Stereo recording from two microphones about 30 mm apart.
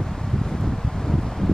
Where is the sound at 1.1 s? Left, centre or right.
Centre.